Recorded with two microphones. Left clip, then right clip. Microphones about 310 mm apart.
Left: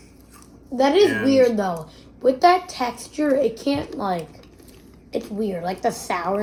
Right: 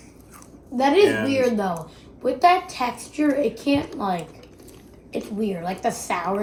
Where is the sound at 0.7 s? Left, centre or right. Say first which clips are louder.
Left 1 dB; left.